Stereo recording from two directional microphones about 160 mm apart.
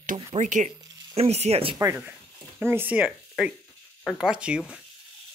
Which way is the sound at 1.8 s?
15° right (ahead or behind).